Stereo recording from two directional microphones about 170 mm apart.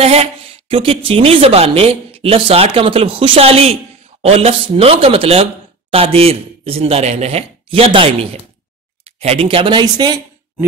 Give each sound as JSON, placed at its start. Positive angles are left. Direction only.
{"t": 0.0, "sound": "speech", "side_deg": -35}